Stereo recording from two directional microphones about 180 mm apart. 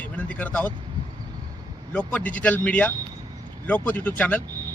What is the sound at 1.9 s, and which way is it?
A man's voice, 10° left (ahead or behind).